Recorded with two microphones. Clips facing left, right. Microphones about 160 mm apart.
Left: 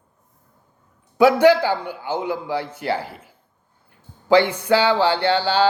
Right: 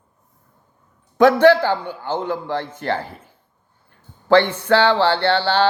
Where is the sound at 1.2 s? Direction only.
10° left (ahead or behind).